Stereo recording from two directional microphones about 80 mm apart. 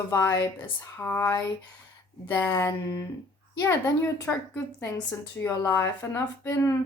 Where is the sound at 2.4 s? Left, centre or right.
Left.